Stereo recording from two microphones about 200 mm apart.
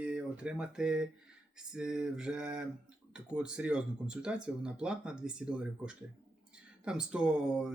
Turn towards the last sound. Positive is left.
turn(degrees=-5)  # may be behind; listen again after turning